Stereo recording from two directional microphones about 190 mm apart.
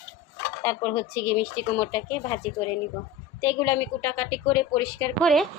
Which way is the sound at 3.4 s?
15° left (ahead or behind).